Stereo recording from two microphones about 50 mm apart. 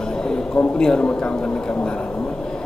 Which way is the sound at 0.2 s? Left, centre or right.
Centre.